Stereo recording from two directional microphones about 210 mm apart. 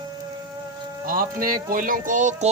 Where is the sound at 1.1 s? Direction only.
45° right (ahead or behind).